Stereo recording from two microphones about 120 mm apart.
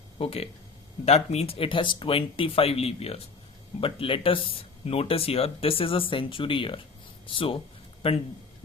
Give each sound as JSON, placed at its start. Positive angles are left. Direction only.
{"t": 0.2, "sound": "speech", "side_deg": 55}